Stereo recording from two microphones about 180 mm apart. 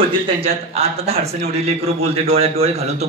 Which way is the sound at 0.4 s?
35° right (ahead or behind).